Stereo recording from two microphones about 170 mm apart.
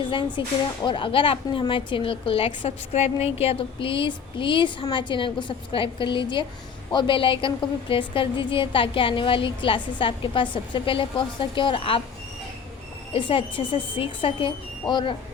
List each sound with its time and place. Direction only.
0.4 s a woman's voice: 30° left (ahead or behind)
13.1 s a woman's voice: 30° left (ahead or behind)